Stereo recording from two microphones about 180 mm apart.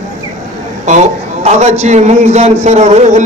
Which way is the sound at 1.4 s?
40° right (ahead or behind).